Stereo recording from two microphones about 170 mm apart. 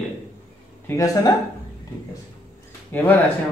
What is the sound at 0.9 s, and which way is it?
Speech, 20° left (ahead or behind).